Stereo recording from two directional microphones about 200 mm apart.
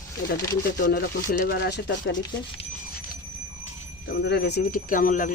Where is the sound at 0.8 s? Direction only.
50° left (ahead or behind).